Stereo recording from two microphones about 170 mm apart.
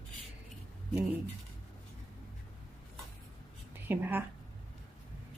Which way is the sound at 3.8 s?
10° right (ahead or behind).